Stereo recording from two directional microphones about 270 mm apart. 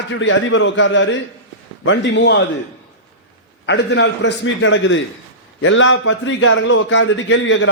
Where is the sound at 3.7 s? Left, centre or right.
Left.